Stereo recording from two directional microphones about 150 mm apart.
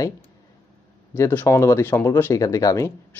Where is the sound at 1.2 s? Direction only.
15° left (ahead or behind).